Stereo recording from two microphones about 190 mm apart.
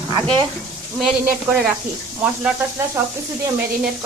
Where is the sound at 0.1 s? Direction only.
25° right (ahead or behind).